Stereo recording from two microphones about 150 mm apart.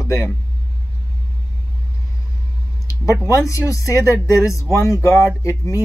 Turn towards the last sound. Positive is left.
turn(degrees=20)  # may be behind; listen again after turning